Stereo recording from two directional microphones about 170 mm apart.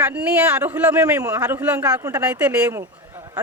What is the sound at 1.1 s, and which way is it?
A man's voice, 20° right (ahead or behind).